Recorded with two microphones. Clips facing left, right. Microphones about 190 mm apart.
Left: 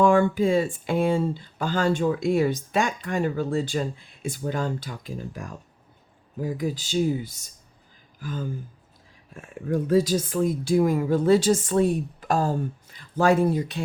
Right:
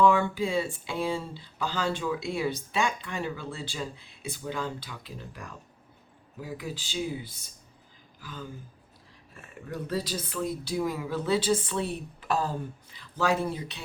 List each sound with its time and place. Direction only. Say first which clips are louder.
0.0 s speech: left 5 dB; 50° left (ahead or behind)